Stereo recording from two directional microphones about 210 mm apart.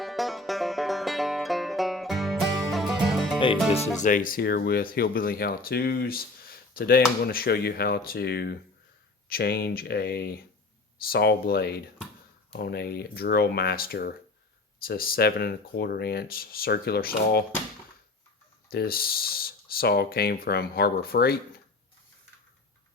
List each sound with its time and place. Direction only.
0.0 s music: centre (ahead or behind)
3.9 s speech: 35° left (ahead or behind)
18.7 s speech: 45° left (ahead or behind)